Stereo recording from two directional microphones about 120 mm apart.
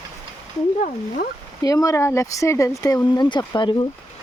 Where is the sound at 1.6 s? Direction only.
30° left (ahead or behind).